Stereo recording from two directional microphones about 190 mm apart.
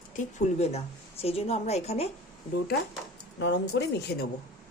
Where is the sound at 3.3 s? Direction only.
65° left (ahead or behind).